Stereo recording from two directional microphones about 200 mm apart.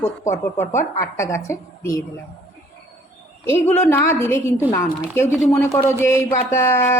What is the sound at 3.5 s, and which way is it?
Speech, 10° left (ahead or behind).